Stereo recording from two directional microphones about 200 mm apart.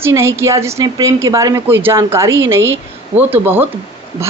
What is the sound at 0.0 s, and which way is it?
A woman's voice, 15° right (ahead or behind).